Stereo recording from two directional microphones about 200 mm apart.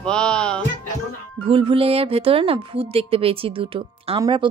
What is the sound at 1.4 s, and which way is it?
Speech, 25° right (ahead or behind).